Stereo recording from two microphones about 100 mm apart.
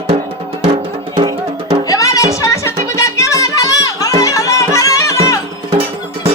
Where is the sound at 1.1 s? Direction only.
50° right (ahead or behind).